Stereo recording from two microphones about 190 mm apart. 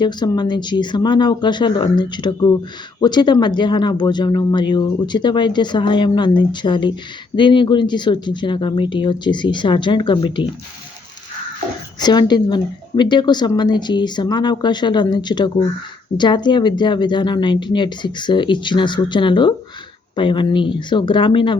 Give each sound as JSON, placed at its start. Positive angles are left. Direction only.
{"t": 0.0, "sound": "speech", "side_deg": 20}
{"t": 11.9, "sound": "speech", "side_deg": 20}